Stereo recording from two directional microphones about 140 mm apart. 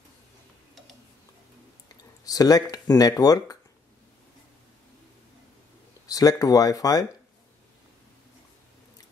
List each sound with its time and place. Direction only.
2.0 s a sound: 25° left (ahead or behind)
2.7 s speech: 25° left (ahead or behind)
6.0 s speech: 25° left (ahead or behind)